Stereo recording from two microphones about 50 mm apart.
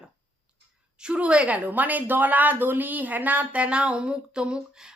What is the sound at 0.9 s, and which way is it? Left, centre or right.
A woman's voice, centre.